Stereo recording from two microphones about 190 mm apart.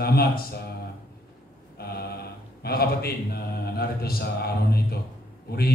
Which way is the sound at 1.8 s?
55° left (ahead or behind).